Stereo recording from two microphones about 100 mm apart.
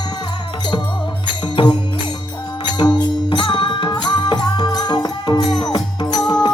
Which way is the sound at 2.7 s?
50° left (ahead or behind).